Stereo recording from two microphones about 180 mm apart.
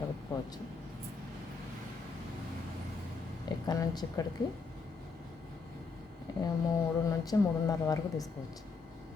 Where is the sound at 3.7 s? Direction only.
20° left (ahead or behind).